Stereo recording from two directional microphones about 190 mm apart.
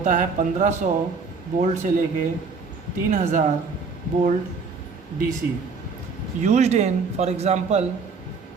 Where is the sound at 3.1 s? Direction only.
40° right (ahead or behind).